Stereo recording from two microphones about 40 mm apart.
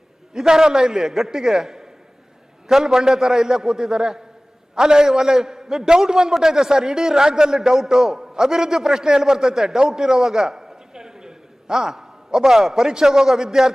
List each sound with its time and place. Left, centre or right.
0.3 s a man's voice: centre